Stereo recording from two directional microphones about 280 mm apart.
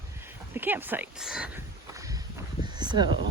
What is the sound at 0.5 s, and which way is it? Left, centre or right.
Speech, centre.